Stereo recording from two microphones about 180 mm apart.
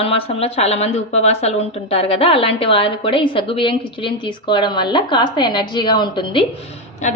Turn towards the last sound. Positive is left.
turn(degrees=40)  # may be behind; listen again after turning